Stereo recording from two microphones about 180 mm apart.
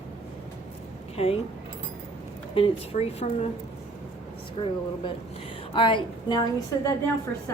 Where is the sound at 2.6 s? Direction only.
30° left (ahead or behind).